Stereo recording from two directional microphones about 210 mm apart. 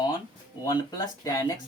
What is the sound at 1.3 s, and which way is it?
Speech, 15° left (ahead or behind).